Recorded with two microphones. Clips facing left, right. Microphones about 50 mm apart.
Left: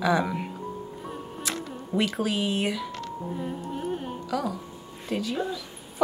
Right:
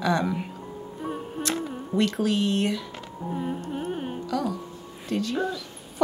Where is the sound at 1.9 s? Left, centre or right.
Centre.